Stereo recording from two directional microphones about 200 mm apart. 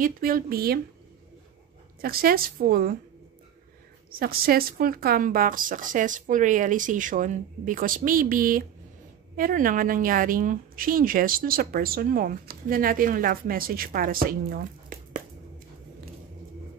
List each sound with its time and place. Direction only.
0.0 s a woman's voice: 45° right (ahead or behind)
2.0 s a woman's voice: 45° right (ahead or behind)
4.2 s a woman's voice: 50° right (ahead or behind)